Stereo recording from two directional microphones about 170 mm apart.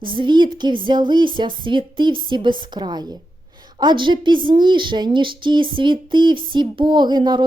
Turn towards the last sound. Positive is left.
turn(degrees=-25)  # may be behind; listen again after turning